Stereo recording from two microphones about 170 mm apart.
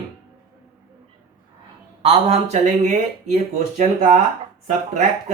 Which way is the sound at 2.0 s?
35° right (ahead or behind).